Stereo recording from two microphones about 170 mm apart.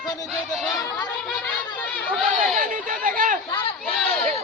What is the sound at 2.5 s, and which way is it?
Speech, 50° right (ahead or behind).